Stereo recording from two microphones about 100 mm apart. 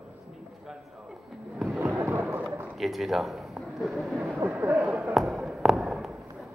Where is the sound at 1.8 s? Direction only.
15° right (ahead or behind).